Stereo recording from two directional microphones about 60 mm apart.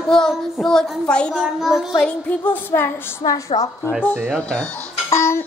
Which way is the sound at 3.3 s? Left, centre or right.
Left.